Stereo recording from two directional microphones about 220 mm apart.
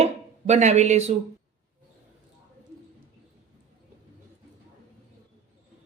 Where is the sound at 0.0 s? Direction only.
30° right (ahead or behind).